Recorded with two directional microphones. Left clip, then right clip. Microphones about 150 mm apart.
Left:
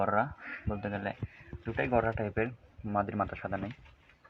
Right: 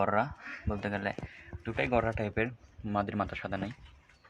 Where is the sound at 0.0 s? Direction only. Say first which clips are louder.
Even; 15° right (ahead or behind).